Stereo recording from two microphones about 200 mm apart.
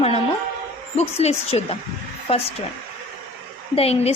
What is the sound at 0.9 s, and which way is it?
A woman's voice, 30° left (ahead or behind).